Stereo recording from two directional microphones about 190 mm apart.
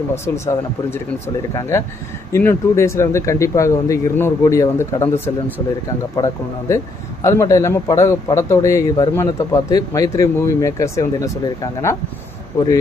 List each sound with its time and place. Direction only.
0.1 s a man's voice: 15° left (ahead or behind)
2.3 s a man's voice: 15° left (ahead or behind)